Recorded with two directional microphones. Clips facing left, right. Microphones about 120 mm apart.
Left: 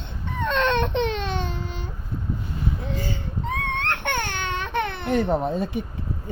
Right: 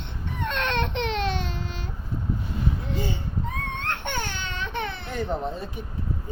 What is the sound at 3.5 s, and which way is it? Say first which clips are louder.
Baby cry: left 8 dB; 75° left (ahead or behind).